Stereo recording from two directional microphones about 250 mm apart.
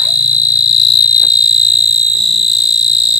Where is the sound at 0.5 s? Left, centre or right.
Centre.